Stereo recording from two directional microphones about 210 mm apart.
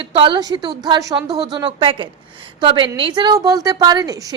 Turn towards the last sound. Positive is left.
turn(degrees=-20)  # may be behind; listen again after turning